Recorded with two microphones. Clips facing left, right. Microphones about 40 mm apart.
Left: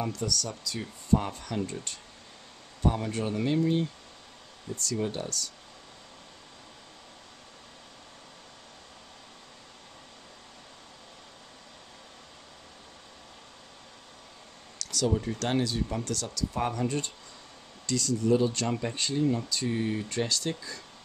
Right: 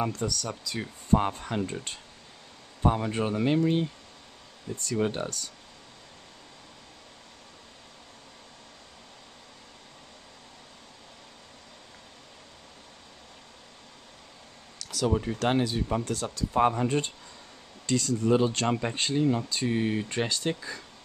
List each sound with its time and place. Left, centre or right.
0.0 s speech: right
2.8 s speech: right
14.8 s speech: centre; by 20.8 s right